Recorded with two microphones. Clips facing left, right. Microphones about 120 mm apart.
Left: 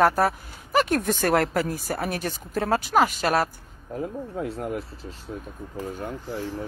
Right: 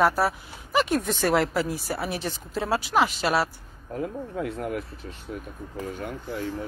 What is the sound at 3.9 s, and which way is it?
Speech, 30° left (ahead or behind).